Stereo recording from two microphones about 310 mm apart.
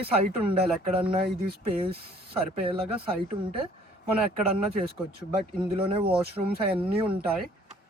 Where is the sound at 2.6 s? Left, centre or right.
Centre.